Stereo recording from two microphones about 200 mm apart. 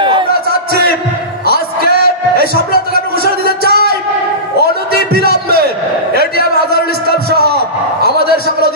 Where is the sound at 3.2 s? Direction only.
50° right (ahead or behind).